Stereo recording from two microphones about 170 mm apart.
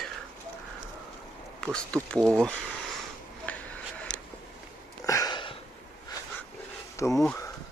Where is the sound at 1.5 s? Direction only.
5° left (ahead or behind).